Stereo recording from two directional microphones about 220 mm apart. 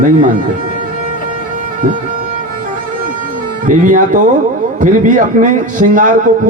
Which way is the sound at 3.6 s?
35° right (ahead or behind).